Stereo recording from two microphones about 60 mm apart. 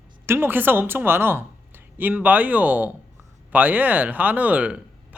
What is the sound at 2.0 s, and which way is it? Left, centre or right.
Speech, right.